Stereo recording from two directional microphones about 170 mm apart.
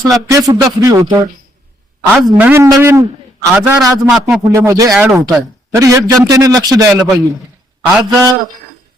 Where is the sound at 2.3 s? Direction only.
10° right (ahead or behind).